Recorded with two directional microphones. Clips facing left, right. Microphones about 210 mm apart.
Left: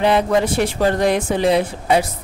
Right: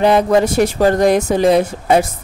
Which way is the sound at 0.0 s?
45° right (ahead or behind).